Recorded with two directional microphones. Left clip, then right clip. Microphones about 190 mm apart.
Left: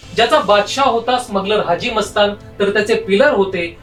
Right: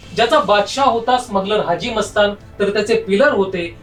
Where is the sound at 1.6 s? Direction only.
5° right (ahead or behind).